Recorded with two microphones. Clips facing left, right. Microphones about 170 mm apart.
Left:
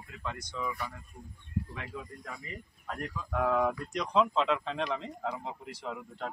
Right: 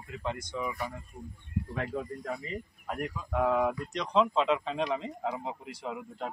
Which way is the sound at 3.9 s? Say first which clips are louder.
Right 1 dB; centre (ahead or behind).